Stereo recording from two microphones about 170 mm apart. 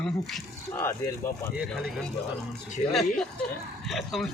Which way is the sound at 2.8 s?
50° left (ahead or behind).